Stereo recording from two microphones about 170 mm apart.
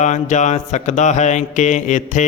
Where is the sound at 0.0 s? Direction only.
45° left (ahead or behind).